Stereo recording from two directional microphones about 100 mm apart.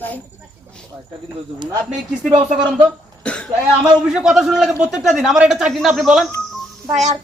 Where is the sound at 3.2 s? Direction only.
10° left (ahead or behind).